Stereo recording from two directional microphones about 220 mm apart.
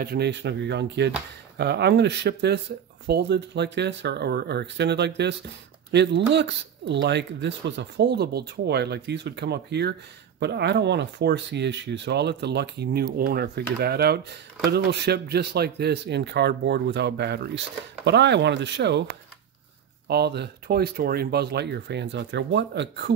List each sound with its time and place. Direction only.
0.0 s speech: 45° right (ahead or behind)
20.1 s speech: 50° right (ahead or behind)